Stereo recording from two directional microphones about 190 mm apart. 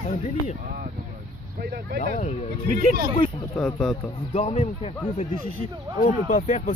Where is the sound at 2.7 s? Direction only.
50° right (ahead or behind).